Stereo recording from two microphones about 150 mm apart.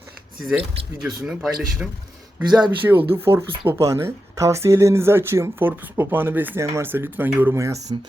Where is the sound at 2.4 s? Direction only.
30° right (ahead or behind).